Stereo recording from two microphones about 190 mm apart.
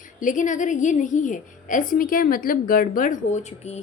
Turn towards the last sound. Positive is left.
turn(degrees=35)  # may be behind; listen again after turning